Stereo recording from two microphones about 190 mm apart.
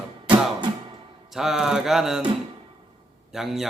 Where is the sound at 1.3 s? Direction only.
Centre (ahead or behind).